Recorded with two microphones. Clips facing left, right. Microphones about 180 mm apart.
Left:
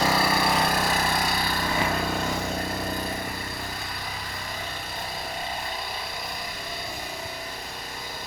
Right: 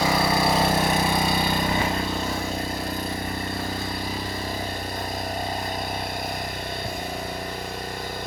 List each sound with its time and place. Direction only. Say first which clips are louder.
0.0 s vehicle: right 2 dB; 15° right (ahead or behind)